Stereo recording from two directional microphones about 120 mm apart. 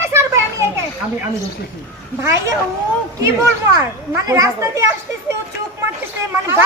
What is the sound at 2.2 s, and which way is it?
Speech, 25° right (ahead or behind).